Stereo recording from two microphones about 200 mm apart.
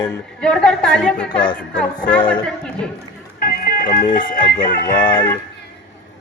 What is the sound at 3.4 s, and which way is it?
Music, 45° left (ahead or behind).